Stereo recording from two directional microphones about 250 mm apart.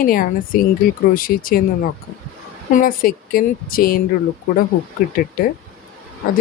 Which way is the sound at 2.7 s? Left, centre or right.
Left.